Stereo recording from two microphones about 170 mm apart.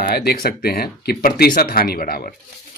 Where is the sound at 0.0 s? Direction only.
65° left (ahead or behind).